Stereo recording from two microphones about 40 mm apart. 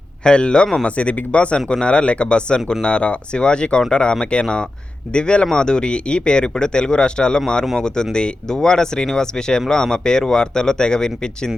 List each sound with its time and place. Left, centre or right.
0.3 s speech: left
0.9 s speech: left; by 11.5 s centre